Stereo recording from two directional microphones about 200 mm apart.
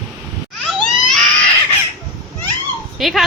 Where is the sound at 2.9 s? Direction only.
Centre (ahead or behind).